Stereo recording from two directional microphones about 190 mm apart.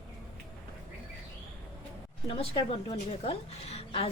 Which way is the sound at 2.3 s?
30° left (ahead or behind).